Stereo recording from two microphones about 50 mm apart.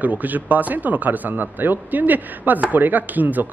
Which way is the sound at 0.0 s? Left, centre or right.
Right.